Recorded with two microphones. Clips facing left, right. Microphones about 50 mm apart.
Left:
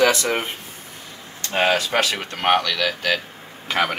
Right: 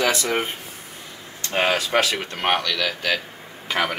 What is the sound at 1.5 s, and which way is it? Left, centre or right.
Speech, centre.